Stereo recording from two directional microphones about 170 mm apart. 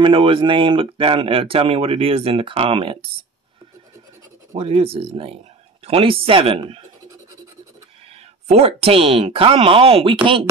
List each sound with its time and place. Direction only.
0.0 s speech: 30° right (ahead or behind)
4.5 s speech: 35° right (ahead or behind)
8.5 s speech: 40° right (ahead or behind)